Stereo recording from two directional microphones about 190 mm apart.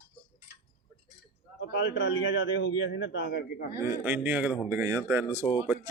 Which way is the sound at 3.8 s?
10° right (ahead or behind).